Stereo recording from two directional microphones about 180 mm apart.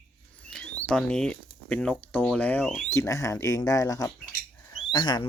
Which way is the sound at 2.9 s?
15° left (ahead or behind).